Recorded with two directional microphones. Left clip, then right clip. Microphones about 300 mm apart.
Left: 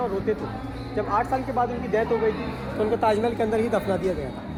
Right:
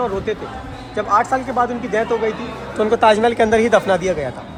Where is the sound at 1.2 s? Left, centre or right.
Right.